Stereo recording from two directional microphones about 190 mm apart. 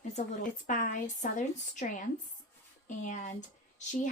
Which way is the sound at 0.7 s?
40° left (ahead or behind).